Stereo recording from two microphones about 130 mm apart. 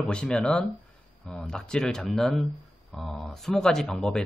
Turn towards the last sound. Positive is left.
turn(degrees=0)  # may be behind; listen again after turning